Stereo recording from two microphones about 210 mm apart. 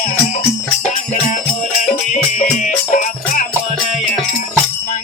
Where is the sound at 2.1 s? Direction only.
40° left (ahead or behind).